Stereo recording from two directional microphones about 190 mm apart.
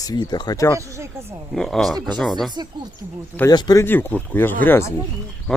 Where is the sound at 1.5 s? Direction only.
Centre (ahead or behind).